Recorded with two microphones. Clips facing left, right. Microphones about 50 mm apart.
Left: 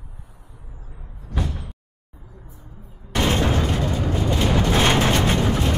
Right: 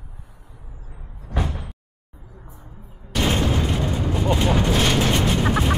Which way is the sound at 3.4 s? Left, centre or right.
Left.